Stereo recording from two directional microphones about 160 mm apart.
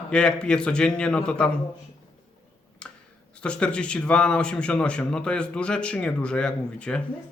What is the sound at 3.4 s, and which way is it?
Speech, 5° left (ahead or behind).